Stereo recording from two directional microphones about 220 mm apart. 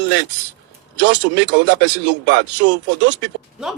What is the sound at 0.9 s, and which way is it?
Speech, 50° right (ahead or behind).